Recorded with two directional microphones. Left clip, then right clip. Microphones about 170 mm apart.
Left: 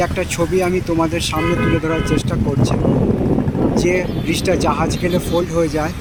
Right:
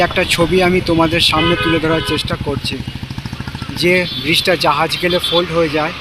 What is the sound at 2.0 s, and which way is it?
Speech, 15° left (ahead or behind).